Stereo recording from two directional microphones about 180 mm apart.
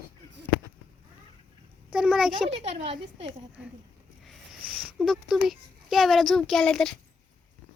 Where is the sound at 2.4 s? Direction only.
35° right (ahead or behind).